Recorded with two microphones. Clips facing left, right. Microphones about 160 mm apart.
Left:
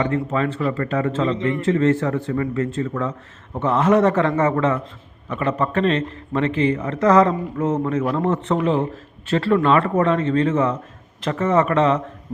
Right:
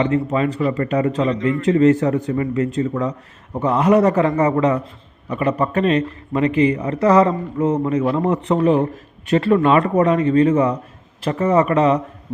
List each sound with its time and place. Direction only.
0.0 s a man's voice: 15° right (ahead or behind)
1.3 s a man's voice: 25° left (ahead or behind)
1.6 s a man's voice: 15° right (ahead or behind)